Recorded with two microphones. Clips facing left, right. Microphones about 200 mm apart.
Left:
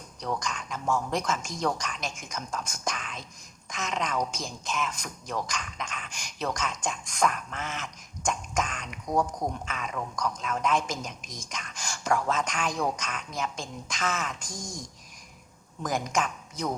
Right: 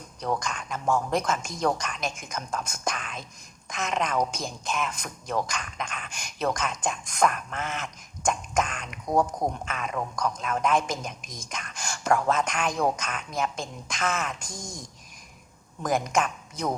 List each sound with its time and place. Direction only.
0.2 s a man's voice: 55° right (ahead or behind)
15.8 s a man's voice: 55° right (ahead or behind)